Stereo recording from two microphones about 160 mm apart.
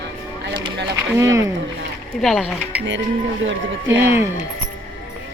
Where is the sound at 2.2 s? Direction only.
Centre (ahead or behind).